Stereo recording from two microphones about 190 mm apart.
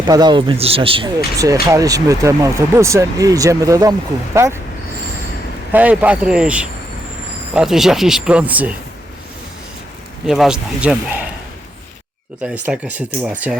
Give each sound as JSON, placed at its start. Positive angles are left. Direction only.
{"t": 0.0, "sound": "speech", "side_deg": -20}
{"t": 5.7, "sound": "speech", "side_deg": -10}
{"t": 10.2, "sound": "speech", "side_deg": 0}
{"t": 12.6, "sound": "speech", "side_deg": -5}